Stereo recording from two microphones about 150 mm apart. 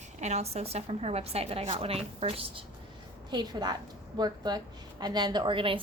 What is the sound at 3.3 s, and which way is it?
A woman's voice, 30° right (ahead or behind).